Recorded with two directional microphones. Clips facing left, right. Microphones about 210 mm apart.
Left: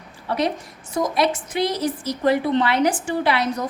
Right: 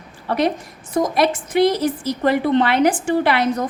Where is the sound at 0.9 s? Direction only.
50° right (ahead or behind).